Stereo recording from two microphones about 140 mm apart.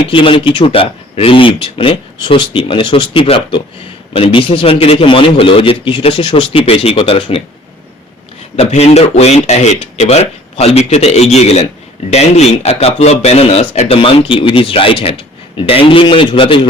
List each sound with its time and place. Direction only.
0.0 s speech: 40° left (ahead or behind)
8.5 s speech: 45° left (ahead or behind)